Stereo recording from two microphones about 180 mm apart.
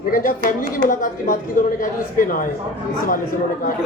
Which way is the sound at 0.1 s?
50° left (ahead or behind).